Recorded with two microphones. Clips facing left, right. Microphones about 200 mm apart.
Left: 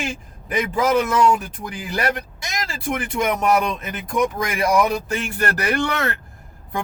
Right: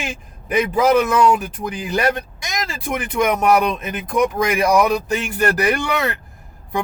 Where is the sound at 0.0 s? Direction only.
20° right (ahead or behind).